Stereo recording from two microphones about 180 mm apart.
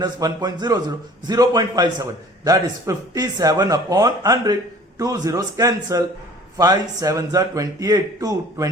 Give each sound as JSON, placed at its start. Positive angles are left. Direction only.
{"t": 0.0, "sound": "a man's voice", "side_deg": -20}